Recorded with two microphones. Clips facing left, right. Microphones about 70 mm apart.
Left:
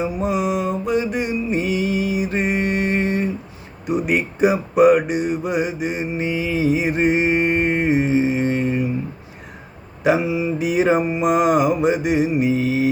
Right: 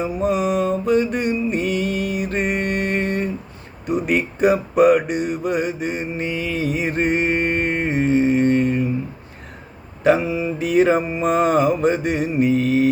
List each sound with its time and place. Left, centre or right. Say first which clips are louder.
0.0 s mantra: right 1 dB; centre
3.8 s a sound: even; centre
10.0 s mantra: right 1 dB; centre